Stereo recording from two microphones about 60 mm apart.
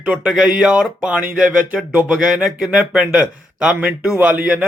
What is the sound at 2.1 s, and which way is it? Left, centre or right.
Speech, centre.